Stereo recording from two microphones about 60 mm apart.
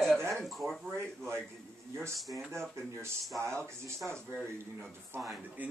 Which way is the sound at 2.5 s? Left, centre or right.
Right.